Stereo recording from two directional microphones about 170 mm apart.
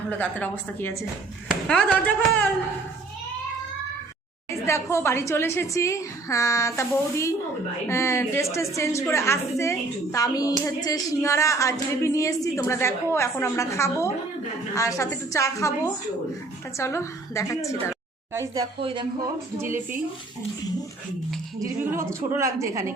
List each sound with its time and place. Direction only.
0.1 s speech: 10° left (ahead or behind)
4.6 s speech: 15° left (ahead or behind)
18.3 s speech: 20° right (ahead or behind)
18.8 s speech: 30° right (ahead or behind)
21.6 s a woman's voice: 15° right (ahead or behind)